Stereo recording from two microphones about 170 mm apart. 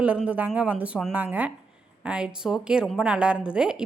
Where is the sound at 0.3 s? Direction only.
10° right (ahead or behind).